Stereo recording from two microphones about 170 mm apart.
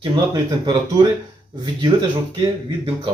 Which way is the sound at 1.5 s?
25° right (ahead or behind).